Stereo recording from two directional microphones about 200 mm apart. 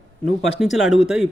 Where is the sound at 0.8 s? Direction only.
Centre (ahead or behind).